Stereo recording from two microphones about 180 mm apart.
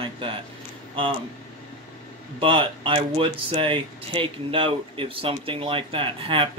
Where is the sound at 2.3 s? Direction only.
30° right (ahead or behind).